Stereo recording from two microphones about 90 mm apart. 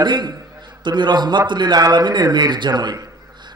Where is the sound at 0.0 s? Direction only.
55° right (ahead or behind).